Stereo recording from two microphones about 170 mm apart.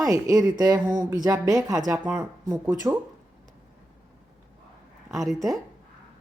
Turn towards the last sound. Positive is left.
turn(degrees=0)  # may be behind; listen again after turning